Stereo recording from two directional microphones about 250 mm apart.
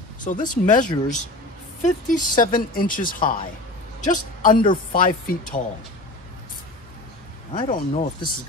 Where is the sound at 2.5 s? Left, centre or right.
Left.